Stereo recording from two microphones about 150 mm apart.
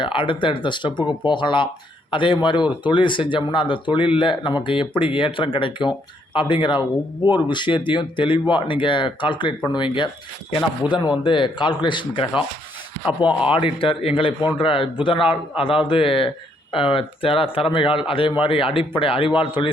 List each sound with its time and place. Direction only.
0.0 s speech: 35° left (ahead or behind)
13.5 s speech: 35° left (ahead or behind)